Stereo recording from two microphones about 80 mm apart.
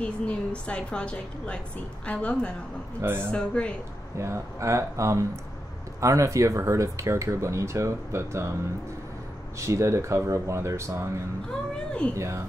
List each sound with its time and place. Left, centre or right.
0.0 s a woman's voice: centre
3.0 s speech: right
3.3 s a woman's voice: centre
4.2 s speech: right
9.6 s speech: right
11.5 s a sound: centre
12.2 s speech: right